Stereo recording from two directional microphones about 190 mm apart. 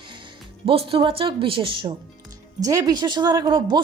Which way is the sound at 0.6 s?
30° right (ahead or behind).